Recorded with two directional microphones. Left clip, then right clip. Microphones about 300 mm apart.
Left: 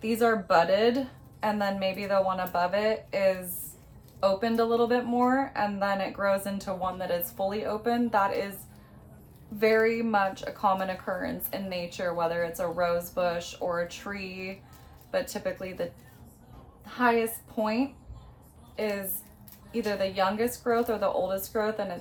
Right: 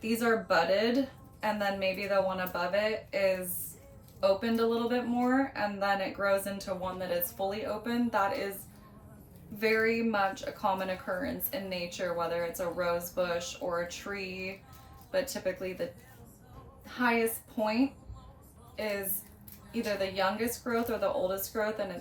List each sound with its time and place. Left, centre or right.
0.0 s a woman's voice: centre
9.6 s a woman's voice: centre
18.8 s a woman's voice: centre
20.0 s a woman's voice: centre